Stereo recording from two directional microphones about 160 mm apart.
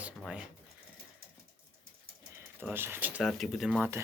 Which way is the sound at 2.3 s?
15° right (ahead or behind).